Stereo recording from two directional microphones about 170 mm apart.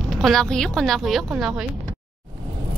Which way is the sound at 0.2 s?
Centre (ahead or behind).